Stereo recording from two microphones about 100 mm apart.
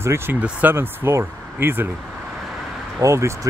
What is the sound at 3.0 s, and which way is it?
Speech, 30° right (ahead or behind).